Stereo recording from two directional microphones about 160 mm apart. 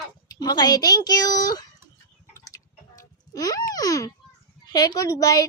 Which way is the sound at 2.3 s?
20° left (ahead or behind).